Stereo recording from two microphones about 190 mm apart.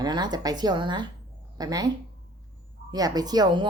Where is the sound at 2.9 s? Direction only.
20° right (ahead or behind).